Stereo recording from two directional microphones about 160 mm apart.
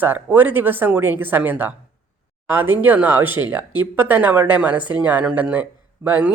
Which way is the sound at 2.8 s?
10° right (ahead or behind).